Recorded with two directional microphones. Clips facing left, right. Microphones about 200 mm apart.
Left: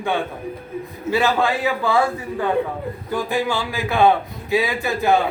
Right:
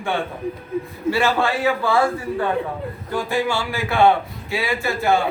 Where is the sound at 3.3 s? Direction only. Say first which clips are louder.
Right 1 dB; 15° left (ahead or behind).